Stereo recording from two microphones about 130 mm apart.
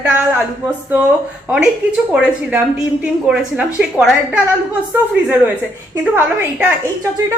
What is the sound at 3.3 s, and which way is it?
A woman's voice, 5° right (ahead or behind).